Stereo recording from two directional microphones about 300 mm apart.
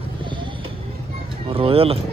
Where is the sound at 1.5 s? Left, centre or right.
Centre.